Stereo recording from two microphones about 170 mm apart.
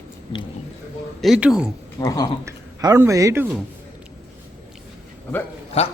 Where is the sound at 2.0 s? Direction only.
20° left (ahead or behind).